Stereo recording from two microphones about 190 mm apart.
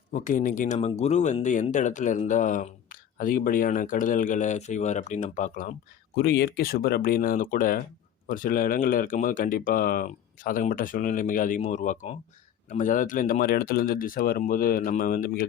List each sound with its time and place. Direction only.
0.1 s speech: 45° left (ahead or behind)
6.1 s speech: 60° left (ahead or behind)